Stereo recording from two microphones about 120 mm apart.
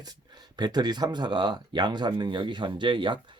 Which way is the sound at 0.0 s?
35° right (ahead or behind).